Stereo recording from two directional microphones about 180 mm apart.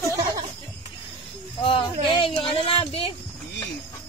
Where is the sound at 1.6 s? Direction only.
30° left (ahead or behind).